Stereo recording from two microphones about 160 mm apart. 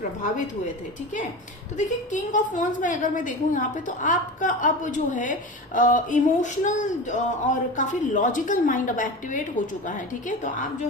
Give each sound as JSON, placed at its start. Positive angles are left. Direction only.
{"t": 2.1, "sound": "a woman's voice", "side_deg": 55}